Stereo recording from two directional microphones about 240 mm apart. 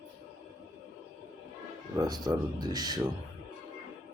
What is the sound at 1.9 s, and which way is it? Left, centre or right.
A man's voice, centre.